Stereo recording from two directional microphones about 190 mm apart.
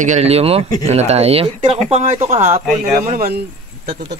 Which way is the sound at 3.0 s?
50° right (ahead or behind).